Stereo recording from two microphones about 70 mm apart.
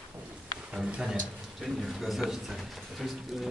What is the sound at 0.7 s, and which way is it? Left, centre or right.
A man's voice, centre.